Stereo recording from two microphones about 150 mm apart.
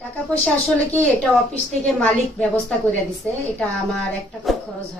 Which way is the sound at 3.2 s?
10° left (ahead or behind).